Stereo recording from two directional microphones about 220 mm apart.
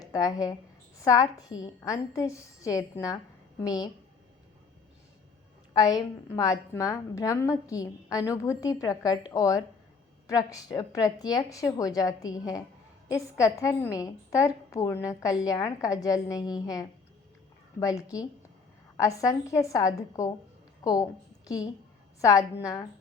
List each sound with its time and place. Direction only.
0.0 s a woman's voice: 15° left (ahead or behind)
5.7 s a woman's voice: 15° left (ahead or behind)